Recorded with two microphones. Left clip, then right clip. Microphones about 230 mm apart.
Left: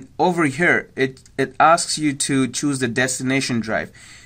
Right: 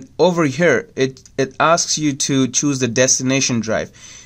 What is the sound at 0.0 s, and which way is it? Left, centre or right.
Speech, right.